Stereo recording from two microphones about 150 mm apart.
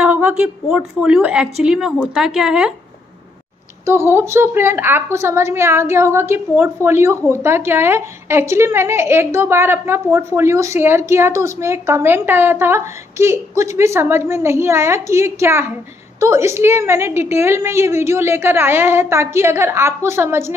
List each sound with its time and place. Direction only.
0.0 s a woman's voice: 10° right (ahead or behind)
3.8 s a woman's voice: 15° right (ahead or behind)